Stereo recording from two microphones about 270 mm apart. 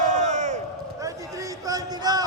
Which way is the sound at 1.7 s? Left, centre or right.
Centre.